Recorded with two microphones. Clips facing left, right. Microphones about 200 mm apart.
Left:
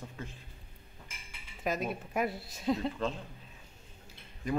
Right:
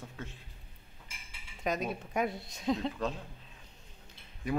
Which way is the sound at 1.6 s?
5° left (ahead or behind).